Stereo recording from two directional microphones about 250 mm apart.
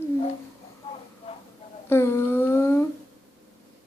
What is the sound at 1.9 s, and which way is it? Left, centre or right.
Child singing, centre.